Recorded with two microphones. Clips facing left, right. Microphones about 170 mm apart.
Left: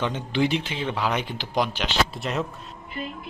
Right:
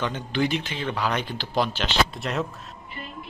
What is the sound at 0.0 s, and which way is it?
Speech, 25° left (ahead or behind).